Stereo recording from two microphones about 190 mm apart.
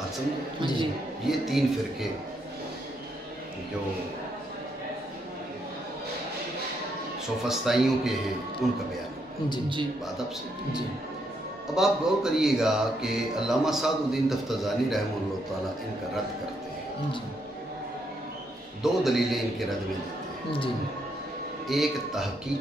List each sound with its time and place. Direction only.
1.2 s speech: centre (ahead or behind)
7.4 s speech: centre (ahead or behind)
11.7 s speech: centre (ahead or behind)
18.8 s speech: centre (ahead or behind)
21.6 s speech: centre (ahead or behind)